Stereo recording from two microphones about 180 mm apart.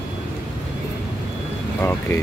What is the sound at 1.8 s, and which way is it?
Speech, 10° left (ahead or behind).